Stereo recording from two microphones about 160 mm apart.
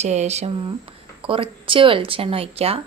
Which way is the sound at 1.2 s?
35° right (ahead or behind).